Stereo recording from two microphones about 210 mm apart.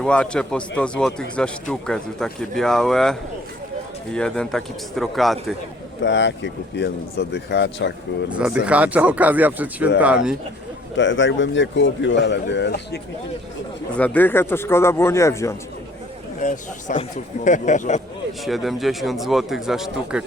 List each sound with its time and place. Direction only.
0.0 s speech: 5° left (ahead or behind)
6.0 s speech: 60° left (ahead or behind)
8.4 s speech: 5° right (ahead or behind)
10.9 s speech: 60° left (ahead or behind)
13.9 s speech: 5° left (ahead or behind)
16.4 s speech: 40° left (ahead or behind)
18.4 s speech: centre (ahead or behind)